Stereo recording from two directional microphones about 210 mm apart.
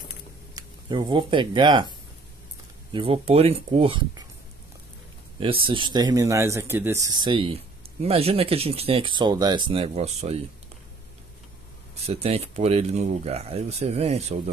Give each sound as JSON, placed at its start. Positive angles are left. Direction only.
{"t": 0.6, "sound": "a man's voice", "side_deg": -20}
{"t": 5.4, "sound": "a man's voice", "side_deg": -25}
{"t": 12.1, "sound": "speech", "side_deg": -30}